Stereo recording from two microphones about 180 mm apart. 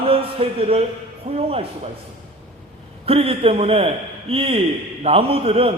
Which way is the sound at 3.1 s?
30° right (ahead or behind).